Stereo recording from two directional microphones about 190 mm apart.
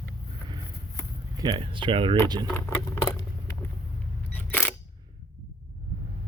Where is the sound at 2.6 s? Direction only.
10° left (ahead or behind).